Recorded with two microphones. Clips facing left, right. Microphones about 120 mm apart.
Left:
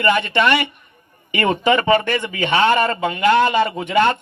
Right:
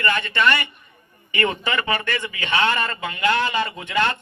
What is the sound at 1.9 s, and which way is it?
Speech, 20° left (ahead or behind).